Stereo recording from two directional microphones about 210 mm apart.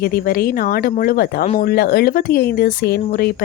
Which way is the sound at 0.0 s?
45° left (ahead or behind).